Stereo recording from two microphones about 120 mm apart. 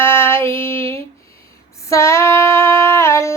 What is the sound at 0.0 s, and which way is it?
Female singing, 20° left (ahead or behind).